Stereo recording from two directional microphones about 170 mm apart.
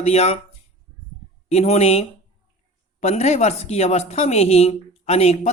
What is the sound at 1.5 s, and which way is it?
A woman's voice, 40° left (ahead or behind).